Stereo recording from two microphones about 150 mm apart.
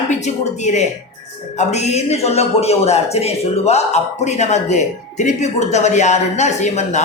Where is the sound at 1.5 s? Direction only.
50° left (ahead or behind).